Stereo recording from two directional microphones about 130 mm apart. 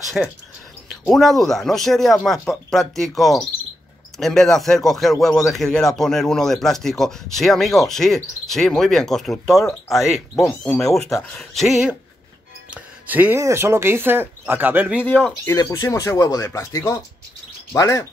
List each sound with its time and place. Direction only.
0.2 s speech: centre (ahead or behind)
12.7 s music: 10° right (ahead or behind)
13.4 s speech: 20° right (ahead or behind)
15.4 s speech: 20° left (ahead or behind)